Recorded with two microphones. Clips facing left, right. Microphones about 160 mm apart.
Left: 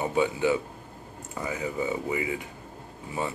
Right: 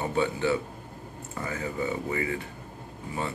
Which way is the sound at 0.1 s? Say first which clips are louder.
Left 1 dB; 15° left (ahead or behind).